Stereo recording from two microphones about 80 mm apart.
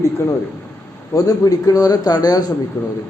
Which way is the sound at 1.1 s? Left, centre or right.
Left.